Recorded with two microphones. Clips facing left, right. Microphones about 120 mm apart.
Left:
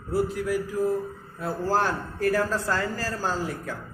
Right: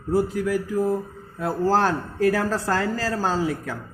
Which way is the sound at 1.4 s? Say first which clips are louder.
Right 4 dB; 90° right.